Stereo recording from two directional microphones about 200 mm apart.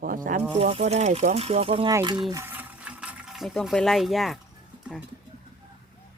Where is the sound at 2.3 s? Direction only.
10° right (ahead or behind).